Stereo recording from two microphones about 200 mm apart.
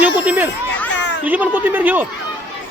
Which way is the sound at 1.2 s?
10° right (ahead or behind).